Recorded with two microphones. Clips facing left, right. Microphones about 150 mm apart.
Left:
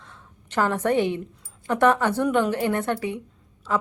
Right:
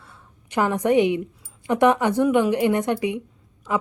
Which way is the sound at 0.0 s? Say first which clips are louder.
Left 1 dB; 10° right (ahead or behind).